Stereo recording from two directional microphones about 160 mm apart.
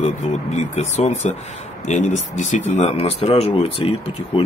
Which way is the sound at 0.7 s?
45° left (ahead or behind).